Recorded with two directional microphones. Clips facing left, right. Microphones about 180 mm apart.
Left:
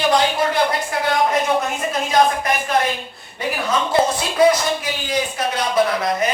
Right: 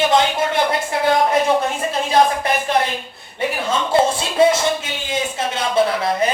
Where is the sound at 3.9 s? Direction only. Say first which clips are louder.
Right 4 dB; 25° right (ahead or behind).